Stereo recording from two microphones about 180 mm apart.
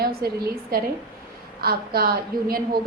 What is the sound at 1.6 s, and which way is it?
A woman's voice, 60° right (ahead or behind).